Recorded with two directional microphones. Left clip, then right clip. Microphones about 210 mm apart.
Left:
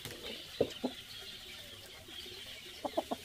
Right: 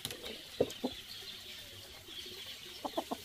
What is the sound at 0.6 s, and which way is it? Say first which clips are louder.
Chicken: even; 35° right (ahead or behind).